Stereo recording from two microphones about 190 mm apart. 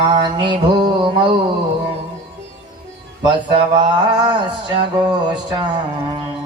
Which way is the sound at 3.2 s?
25° right (ahead or behind).